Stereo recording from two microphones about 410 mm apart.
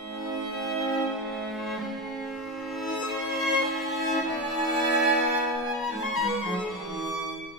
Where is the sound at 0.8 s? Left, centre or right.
Centre.